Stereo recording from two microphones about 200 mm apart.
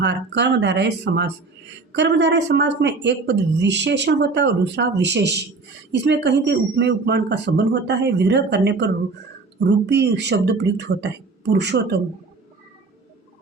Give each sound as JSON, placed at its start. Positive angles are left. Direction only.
{"t": 0.0, "sound": "speech", "side_deg": -60}